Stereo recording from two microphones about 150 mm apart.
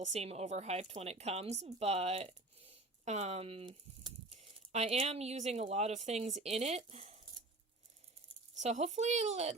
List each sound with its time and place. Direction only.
0.1 s speech: 45° right (ahead or behind)
8.5 s speech: 50° right (ahead or behind)